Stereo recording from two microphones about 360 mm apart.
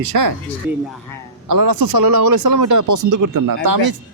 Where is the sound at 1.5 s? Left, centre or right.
Right.